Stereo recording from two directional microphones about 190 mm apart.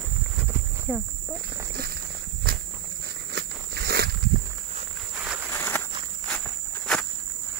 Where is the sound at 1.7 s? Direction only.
55° right (ahead or behind).